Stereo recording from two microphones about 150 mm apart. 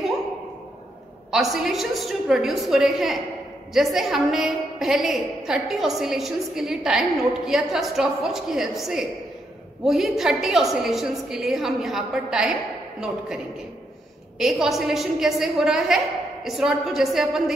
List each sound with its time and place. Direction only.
1.3 s a woman's voice: centre (ahead or behind)
14.4 s a woman's voice: centre (ahead or behind)